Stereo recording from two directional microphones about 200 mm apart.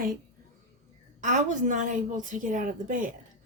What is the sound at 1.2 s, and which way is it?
A woman's voice, 40° right (ahead or behind).